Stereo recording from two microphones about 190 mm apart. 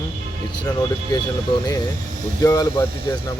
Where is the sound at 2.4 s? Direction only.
20° left (ahead or behind).